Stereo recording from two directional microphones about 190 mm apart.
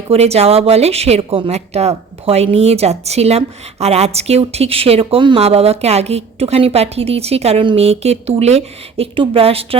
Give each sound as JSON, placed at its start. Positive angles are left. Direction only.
{"t": 0.1, "sound": "a woman's voice", "side_deg": -35}